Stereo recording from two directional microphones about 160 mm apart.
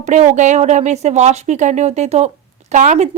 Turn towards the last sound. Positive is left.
turn(degrees=-45)  # may be behind; listen again after turning